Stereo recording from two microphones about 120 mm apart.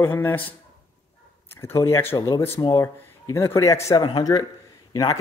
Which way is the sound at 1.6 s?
20° left (ahead or behind).